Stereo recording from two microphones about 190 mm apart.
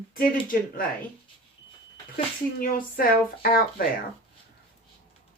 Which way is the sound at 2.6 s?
50° left (ahead or behind).